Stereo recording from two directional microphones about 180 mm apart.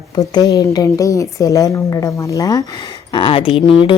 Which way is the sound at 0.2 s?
20° left (ahead or behind).